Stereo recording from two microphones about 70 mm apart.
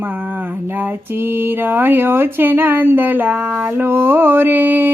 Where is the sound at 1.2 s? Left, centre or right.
Right.